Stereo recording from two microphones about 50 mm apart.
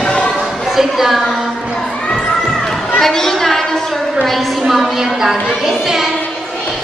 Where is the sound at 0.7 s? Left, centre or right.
Centre.